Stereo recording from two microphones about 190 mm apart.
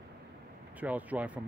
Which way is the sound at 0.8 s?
10° right (ahead or behind).